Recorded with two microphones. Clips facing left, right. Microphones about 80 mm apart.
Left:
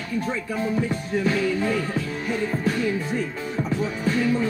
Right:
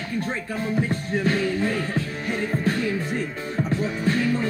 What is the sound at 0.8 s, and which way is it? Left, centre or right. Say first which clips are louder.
Music: even; right.